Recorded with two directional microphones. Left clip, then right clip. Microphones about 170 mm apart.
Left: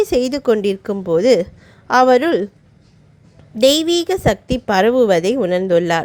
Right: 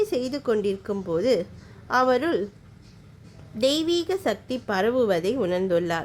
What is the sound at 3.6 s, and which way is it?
A woman's voice, 35° left (ahead or behind).